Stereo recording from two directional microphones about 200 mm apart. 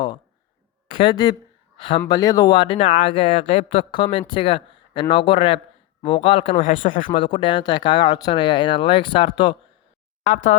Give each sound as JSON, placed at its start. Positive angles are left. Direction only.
{"t": 0.9, "sound": "speech", "side_deg": 25}
{"t": 7.2, "sound": "speech", "side_deg": 25}
{"t": 10.2, "sound": "speech", "side_deg": 35}